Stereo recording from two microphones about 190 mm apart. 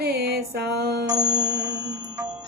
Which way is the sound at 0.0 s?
55° right (ahead or behind).